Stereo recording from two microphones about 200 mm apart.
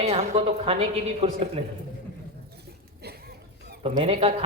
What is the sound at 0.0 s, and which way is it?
Speech, 30° right (ahead or behind).